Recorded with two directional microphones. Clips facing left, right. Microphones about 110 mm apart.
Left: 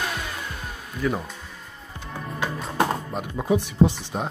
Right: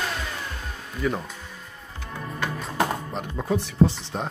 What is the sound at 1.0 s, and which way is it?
Speech, centre (ahead or behind).